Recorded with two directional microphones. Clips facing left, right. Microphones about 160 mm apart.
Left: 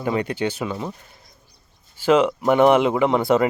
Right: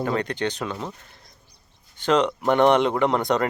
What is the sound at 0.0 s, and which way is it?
Speech, 10° left (ahead or behind).